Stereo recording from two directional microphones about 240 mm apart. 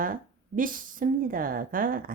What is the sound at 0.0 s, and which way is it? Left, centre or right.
Speech, right.